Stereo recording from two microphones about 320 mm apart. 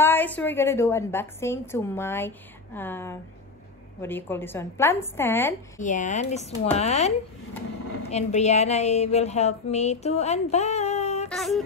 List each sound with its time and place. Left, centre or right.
0.0 s a woman's voice: centre
5.8 s a woman's voice: left
11.2 s a sound: centre